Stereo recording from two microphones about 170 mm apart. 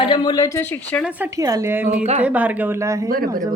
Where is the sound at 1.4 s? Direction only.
20° right (ahead or behind).